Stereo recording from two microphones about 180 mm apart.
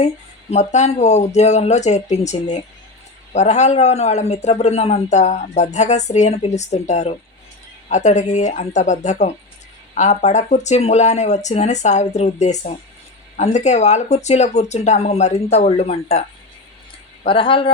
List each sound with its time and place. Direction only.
0.5 s a man's voice: 40° left (ahead or behind)
17.2 s speech: 30° left (ahead or behind)